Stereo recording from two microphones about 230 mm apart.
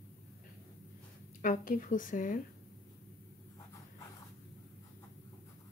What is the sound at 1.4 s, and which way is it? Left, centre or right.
Speech, left.